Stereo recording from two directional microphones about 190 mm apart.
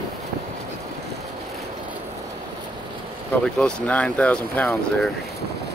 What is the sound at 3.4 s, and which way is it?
Speech, 5° left (ahead or behind).